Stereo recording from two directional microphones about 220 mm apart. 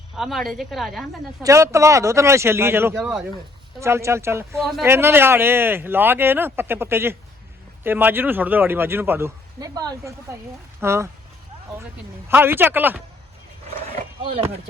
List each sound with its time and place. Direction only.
0.2 s a woman's voice: centre (ahead or behind)
1.4 s a man's voice: 15° right (ahead or behind)
4.6 s a woman's voice: centre (ahead or behind)
4.9 s a man's voice: 10° right (ahead or behind)
12.3 s a man's voice: 10° right (ahead or behind)
14.2 s speech: 25° right (ahead or behind)